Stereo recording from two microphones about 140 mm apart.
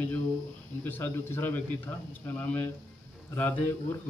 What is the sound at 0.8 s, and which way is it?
Speech, 15° left (ahead or behind).